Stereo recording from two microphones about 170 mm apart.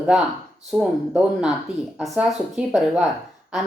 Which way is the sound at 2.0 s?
5° right (ahead or behind).